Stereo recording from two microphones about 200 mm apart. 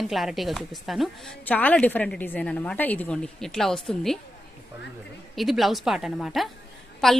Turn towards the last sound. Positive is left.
turn(degrees=0)  # may be behind; listen again after turning